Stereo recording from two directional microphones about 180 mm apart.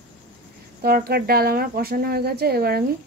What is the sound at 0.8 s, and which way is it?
Speech, 55° right (ahead or behind).